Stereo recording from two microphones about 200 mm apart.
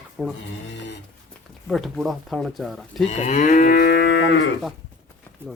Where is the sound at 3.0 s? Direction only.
35° left (ahead or behind); by 4.5 s 65° left (ahead or behind).